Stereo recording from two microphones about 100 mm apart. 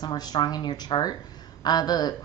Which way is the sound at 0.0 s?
45° left (ahead or behind).